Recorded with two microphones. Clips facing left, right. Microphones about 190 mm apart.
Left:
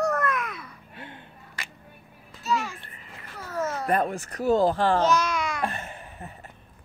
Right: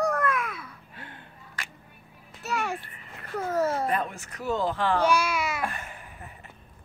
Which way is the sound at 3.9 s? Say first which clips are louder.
Left 5 dB; 45° left (ahead or behind).